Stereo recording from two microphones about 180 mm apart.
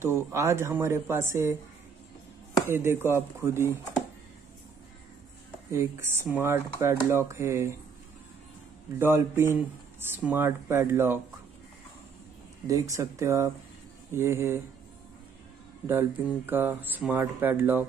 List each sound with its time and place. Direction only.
0.0 s speech: 15° right (ahead or behind)
2.6 s speech: 10° right (ahead or behind)
5.7 s speech: 15° right (ahead or behind)
8.9 s speech: 15° right (ahead or behind)
12.6 s speech: 15° right (ahead or behind)
16.4 s speech: 10° right (ahead or behind)